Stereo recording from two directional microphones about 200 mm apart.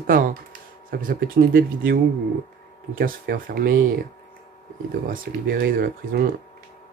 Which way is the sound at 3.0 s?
45° right (ahead or behind).